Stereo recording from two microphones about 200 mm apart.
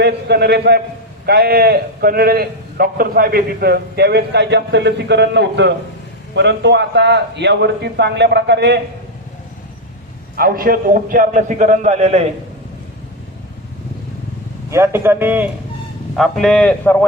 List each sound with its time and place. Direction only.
0.0 s a man's voice: 55° right (ahead or behind)
10.3 s a man's voice: 45° right (ahead or behind)
14.7 s a man's voice: 15° right (ahead or behind)
16.1 s a man's voice: centre (ahead or behind)